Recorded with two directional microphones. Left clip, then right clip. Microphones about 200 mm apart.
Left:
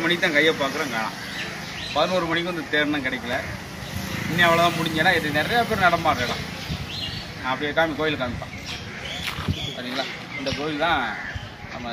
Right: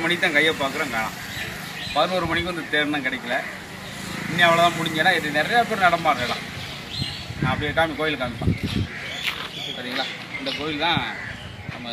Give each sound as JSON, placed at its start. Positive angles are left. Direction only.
{"t": 0.0, "sound": "speech", "side_deg": 0}
{"t": 4.4, "sound": "speech", "side_deg": 0}
{"t": 7.4, "sound": "speech", "side_deg": 0}
{"t": 10.8, "sound": "speech", "side_deg": 35}